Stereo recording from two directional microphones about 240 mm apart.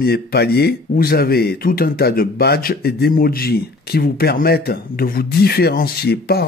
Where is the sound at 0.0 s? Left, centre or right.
Left.